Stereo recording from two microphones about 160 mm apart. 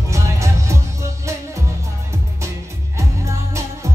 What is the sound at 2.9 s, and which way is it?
Music, 20° right (ahead or behind).